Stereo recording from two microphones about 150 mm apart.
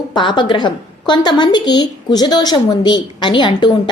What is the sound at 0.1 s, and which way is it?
A woman's voice, 30° left (ahead or behind).